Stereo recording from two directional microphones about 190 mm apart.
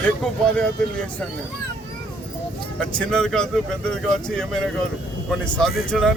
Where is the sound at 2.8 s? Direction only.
5° left (ahead or behind).